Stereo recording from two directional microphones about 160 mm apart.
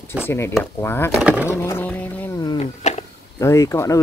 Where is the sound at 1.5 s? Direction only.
15° left (ahead or behind).